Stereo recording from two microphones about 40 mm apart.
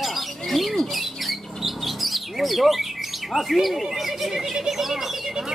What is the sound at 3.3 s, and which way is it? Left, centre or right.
Speech, centre.